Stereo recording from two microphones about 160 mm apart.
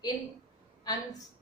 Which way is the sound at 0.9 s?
25° left (ahead or behind).